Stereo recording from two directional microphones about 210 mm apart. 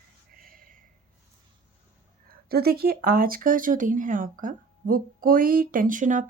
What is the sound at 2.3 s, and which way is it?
Speech, 45° right (ahead or behind).